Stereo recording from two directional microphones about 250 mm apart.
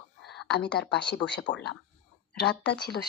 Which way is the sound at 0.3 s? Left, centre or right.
Left.